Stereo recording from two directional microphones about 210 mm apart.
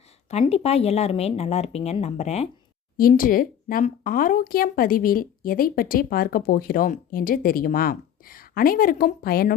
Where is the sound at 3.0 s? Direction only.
40° left (ahead or behind).